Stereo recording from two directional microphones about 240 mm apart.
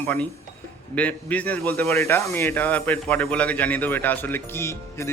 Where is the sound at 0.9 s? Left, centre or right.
Centre.